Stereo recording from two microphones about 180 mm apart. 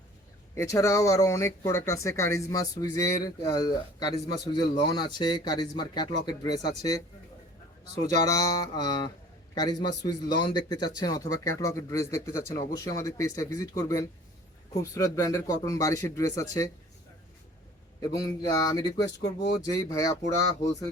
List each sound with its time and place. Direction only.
0.5 s speech: 20° left (ahead or behind)
8.2 s speech: 20° left (ahead or behind)
18.0 s speech: 20° left (ahead or behind)